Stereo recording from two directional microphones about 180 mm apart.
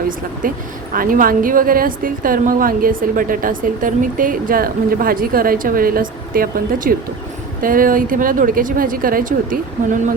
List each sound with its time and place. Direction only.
0.4 s a woman's voice: 50° right (ahead or behind)